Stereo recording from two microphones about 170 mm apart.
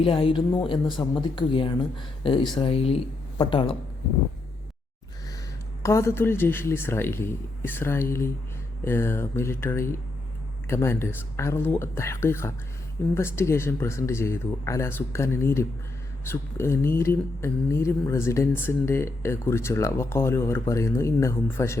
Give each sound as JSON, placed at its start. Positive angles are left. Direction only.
{"t": 0.0, "sound": "a man's voice", "side_deg": 30}
{"t": 5.8, "sound": "speech", "side_deg": 15}